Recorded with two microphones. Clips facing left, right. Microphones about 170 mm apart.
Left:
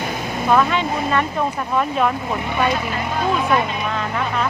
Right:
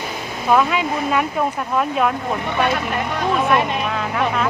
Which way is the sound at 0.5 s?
5° right (ahead or behind).